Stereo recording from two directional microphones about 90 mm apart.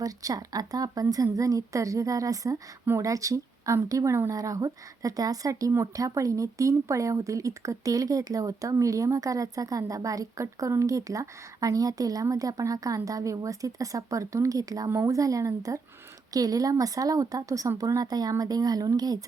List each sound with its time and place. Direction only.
0.0 s speech: 40° right (ahead or behind)